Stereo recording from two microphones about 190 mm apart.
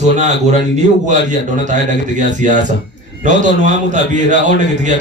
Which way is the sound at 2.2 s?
40° right (ahead or behind).